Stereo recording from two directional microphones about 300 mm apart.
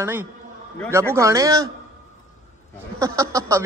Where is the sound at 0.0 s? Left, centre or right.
Centre.